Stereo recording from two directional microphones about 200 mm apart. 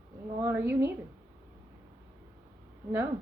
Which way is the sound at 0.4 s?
10° right (ahead or behind).